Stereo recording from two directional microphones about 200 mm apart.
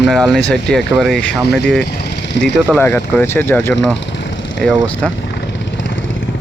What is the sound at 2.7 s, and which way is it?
Speech, 10° left (ahead or behind).